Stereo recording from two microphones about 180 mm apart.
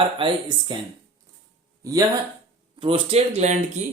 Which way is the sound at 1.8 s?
20° right (ahead or behind).